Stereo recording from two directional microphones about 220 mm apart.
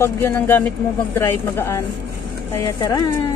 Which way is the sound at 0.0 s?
10° left (ahead or behind).